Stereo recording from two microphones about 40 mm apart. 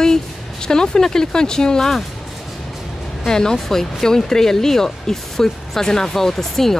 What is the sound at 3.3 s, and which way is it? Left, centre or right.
Speech, centre.